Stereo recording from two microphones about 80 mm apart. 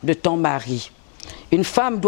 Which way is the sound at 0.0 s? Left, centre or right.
Centre.